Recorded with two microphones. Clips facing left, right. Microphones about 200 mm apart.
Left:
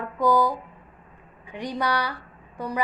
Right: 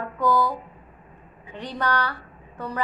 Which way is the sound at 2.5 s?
10° left (ahead or behind).